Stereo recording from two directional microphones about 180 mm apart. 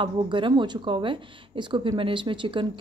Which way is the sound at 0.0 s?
25° right (ahead or behind).